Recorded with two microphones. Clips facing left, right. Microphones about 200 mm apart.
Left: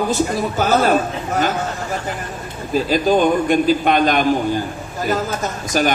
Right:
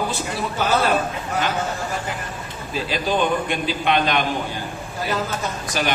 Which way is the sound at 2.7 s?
45° left (ahead or behind).